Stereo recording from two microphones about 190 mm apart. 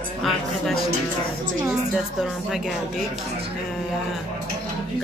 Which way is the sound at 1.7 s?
5° right (ahead or behind).